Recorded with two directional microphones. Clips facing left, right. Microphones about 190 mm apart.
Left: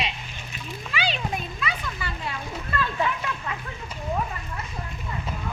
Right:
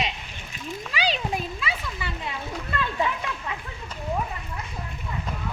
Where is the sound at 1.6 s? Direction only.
25° right (ahead or behind).